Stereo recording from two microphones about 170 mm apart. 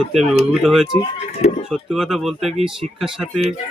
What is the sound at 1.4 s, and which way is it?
Speech, 45° left (ahead or behind).